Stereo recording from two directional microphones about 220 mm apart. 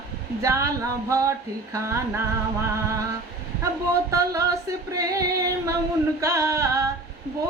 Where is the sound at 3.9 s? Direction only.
15° right (ahead or behind).